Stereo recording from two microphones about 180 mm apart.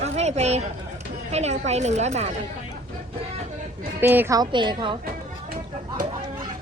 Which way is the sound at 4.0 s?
10° right (ahead or behind).